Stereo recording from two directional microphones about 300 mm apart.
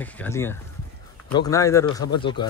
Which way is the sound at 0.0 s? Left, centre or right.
Centre.